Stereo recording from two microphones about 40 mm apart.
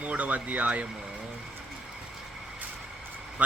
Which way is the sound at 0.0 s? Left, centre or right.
Right.